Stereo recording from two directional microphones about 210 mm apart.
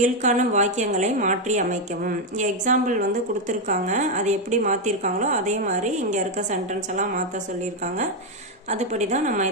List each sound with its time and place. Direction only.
0.0 s a woman's voice: 35° right (ahead or behind)
8.6 s a woman's voice: 35° right (ahead or behind)